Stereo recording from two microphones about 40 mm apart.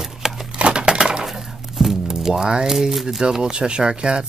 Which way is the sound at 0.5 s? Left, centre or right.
Right.